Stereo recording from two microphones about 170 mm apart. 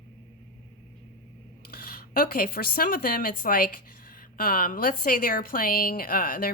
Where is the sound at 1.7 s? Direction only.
60° left (ahead or behind).